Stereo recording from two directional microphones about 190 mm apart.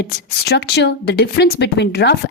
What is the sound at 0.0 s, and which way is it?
Speech, 55° left (ahead or behind).